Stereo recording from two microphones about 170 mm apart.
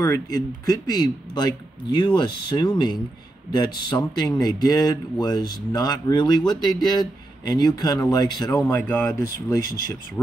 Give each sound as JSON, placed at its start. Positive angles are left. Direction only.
{"t": 0.0, "sound": "a man's voice", "side_deg": 20}